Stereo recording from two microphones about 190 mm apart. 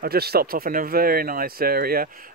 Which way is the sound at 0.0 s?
55° right (ahead or behind).